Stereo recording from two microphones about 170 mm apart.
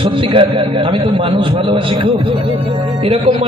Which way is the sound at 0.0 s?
30° right (ahead or behind).